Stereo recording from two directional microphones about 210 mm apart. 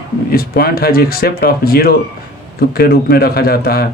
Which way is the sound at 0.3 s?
45° left (ahead or behind).